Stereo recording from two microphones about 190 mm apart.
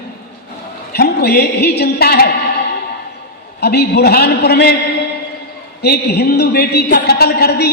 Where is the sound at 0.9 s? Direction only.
55° left (ahead or behind).